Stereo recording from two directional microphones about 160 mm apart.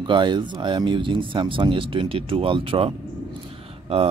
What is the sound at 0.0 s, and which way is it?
Speech, 30° right (ahead or behind).